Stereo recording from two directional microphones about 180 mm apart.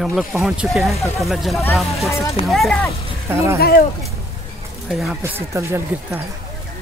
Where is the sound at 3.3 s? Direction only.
15° right (ahead or behind).